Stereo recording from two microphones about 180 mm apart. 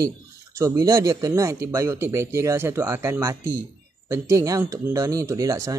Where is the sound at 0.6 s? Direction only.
20° right (ahead or behind).